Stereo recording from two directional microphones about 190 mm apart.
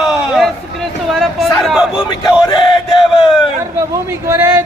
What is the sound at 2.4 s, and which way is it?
Chant, 25° left (ahead or behind).